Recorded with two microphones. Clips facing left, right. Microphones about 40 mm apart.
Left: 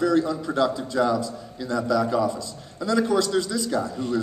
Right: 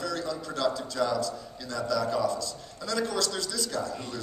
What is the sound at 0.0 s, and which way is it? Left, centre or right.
A man's voice, left.